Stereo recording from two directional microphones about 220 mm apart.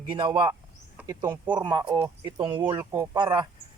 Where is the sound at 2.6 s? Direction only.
10° right (ahead or behind).